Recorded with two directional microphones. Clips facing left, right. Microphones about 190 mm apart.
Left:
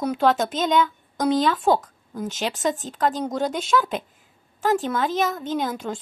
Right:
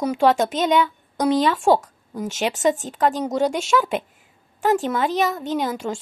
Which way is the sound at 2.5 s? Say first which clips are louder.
Right 7 dB; 40° right (ahead or behind).